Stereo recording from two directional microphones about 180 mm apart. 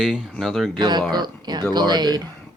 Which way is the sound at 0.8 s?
25° right (ahead or behind).